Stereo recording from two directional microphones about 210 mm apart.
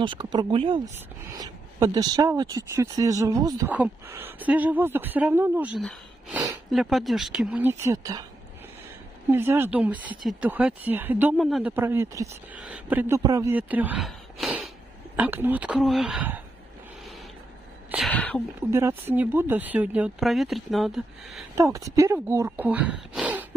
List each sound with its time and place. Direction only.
0.0 s speech: 20° right (ahead or behind)
0.9 s speech: 15° right (ahead or behind)
9.3 s speech: 10° right (ahead or behind)
17.9 s speech: 5° left (ahead or behind)
18.7 s speech: 10° right (ahead or behind)
21.5 s speech: 15° right (ahead or behind)